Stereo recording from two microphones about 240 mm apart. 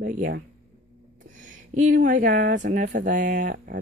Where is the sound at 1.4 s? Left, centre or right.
Right.